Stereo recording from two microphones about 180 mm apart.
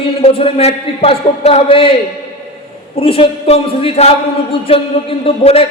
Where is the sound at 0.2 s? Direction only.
35° left (ahead or behind).